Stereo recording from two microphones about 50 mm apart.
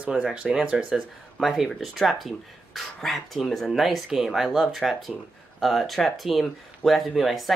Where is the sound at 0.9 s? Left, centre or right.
Centre.